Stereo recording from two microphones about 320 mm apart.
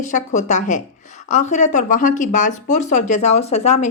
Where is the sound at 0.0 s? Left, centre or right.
Left.